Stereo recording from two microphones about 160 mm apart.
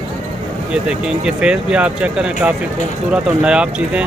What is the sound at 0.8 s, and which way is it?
Speech, 5° right (ahead or behind).